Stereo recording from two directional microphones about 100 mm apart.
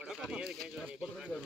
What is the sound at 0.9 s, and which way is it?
Speech, 5° right (ahead or behind).